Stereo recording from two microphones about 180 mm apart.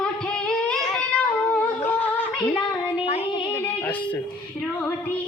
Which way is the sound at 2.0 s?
10° left (ahead or behind).